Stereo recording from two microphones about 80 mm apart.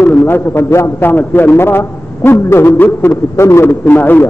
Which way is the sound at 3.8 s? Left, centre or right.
Left.